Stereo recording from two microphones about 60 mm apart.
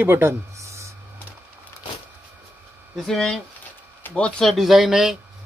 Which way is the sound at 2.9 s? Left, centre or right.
Centre.